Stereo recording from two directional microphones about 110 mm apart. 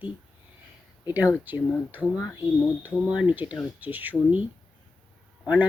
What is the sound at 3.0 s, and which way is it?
Speech, 10° right (ahead or behind).